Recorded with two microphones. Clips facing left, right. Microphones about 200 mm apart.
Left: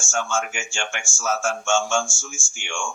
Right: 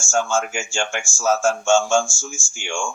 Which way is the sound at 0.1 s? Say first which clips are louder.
Right 5 dB; 35° right (ahead or behind).